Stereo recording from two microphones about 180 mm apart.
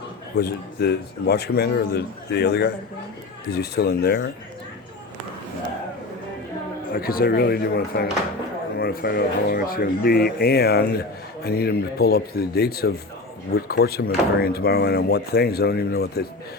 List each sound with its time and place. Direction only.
0.3 s speech: 65° left (ahead or behind)
6.9 s speech: 55° left (ahead or behind)